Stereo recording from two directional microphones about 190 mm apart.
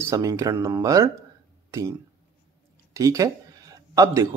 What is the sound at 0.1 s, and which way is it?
Speech, 15° right (ahead or behind).